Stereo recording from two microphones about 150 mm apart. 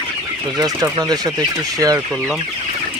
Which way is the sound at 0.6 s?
25° right (ahead or behind).